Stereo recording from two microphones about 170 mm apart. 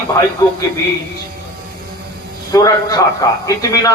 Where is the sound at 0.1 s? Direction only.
15° left (ahead or behind).